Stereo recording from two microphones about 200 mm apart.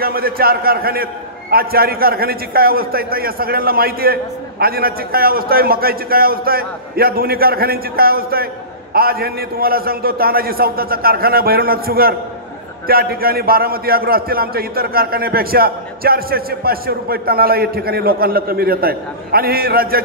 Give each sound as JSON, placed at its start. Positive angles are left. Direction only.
{"t": 0.0, "sound": "a man's voice", "side_deg": -50}